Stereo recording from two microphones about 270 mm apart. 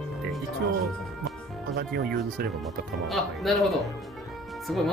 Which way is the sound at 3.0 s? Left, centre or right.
Centre.